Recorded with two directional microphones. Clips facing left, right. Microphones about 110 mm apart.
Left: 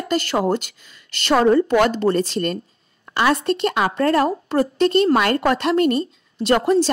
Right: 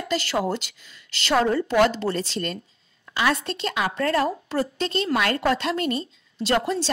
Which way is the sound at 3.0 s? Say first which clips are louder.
Left 5 dB; 55° left (ahead or behind).